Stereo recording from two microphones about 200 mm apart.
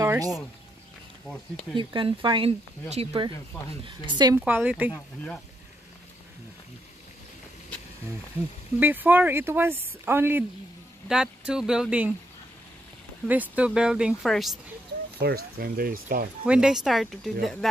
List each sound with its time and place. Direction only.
0.0 s a sound: 15° right (ahead or behind)
1.2 s speech: centre (ahead or behind)
1.8 s speech: 25° right (ahead or behind)
4.4 s speech: 10° right (ahead or behind)
4.9 s speech: 5° left (ahead or behind)
8.7 s speech: 10° right (ahead or behind)
13.3 s speech: 5° right (ahead or behind)
15.1 s speech: 50° right (ahead or behind)
16.4 s speech: 5° right (ahead or behind)